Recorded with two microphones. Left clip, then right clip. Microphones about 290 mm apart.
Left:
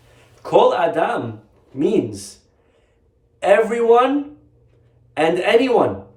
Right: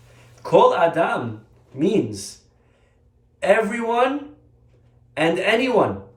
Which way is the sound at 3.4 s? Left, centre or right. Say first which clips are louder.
Left 4 dB; centre.